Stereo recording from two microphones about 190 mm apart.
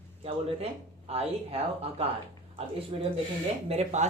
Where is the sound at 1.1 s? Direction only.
30° right (ahead or behind).